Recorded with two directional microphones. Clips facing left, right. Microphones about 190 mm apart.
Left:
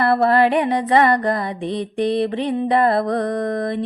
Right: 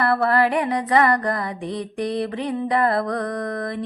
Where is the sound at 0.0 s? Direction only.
25° left (ahead or behind).